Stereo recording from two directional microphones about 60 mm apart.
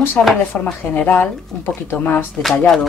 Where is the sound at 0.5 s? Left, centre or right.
Left.